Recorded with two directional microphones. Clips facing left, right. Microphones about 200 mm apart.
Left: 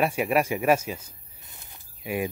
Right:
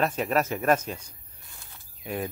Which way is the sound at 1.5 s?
15° left (ahead or behind).